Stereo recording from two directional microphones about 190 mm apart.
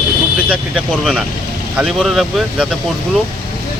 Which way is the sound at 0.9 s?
Centre (ahead or behind).